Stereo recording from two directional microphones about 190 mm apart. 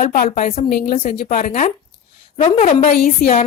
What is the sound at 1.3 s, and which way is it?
A woman's voice, 45° left (ahead or behind).